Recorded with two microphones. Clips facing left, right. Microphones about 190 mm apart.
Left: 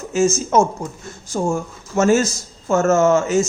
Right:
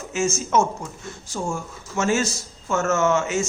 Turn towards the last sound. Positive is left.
turn(degrees=40)  # may be behind; listen again after turning